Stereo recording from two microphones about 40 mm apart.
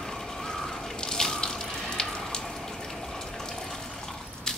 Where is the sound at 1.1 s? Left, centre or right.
Centre.